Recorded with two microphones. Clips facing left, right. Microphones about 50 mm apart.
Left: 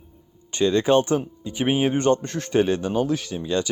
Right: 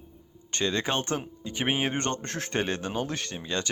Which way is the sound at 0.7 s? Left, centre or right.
Right.